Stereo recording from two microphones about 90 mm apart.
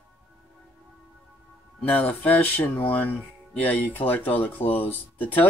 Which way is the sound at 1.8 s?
15° left (ahead or behind).